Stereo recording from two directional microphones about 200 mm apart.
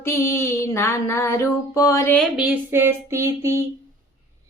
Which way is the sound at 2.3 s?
10° right (ahead or behind).